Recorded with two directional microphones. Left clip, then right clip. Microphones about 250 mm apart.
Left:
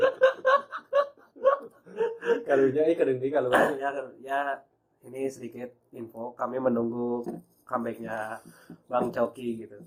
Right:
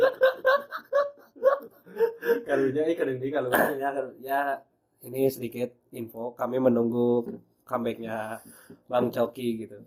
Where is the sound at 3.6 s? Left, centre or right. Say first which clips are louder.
Even; right.